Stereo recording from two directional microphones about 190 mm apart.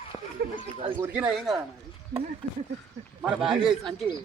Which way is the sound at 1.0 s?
5° right (ahead or behind).